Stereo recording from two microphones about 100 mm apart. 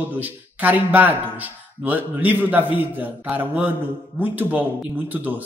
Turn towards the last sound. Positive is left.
turn(degrees=-20)  # may be behind; listen again after turning